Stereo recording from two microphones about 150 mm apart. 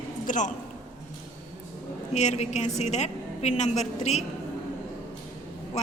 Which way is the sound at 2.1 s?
50° left (ahead or behind).